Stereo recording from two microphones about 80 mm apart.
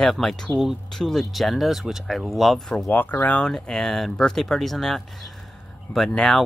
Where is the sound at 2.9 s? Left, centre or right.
Left.